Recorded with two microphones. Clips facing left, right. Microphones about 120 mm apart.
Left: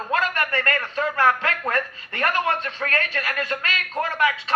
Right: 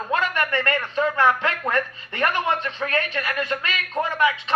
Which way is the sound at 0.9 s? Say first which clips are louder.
Right 1 dB; 20° right (ahead or behind).